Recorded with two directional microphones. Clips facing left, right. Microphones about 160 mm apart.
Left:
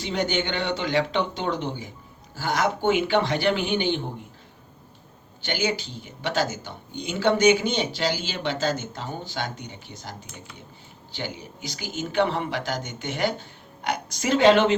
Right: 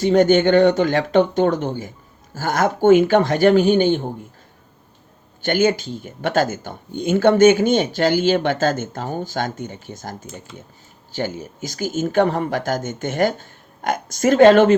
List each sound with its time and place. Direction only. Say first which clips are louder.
0.0 s speech: right 12 dB; 45° right (ahead or behind)
5.4 s speech: right 9 dB; 50° right (ahead or behind)